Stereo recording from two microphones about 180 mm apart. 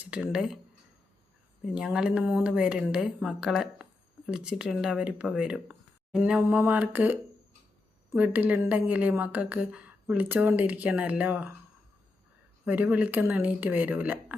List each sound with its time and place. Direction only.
0.0 s speech: 5° right (ahead or behind)
1.6 s a woman's voice: 5° right (ahead or behind)
12.6 s a woman's voice: 10° right (ahead or behind)